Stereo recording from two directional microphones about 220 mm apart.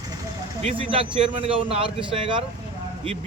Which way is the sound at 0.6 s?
25° right (ahead or behind).